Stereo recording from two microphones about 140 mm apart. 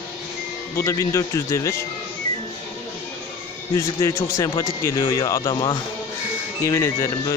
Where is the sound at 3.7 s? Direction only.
20° left (ahead or behind).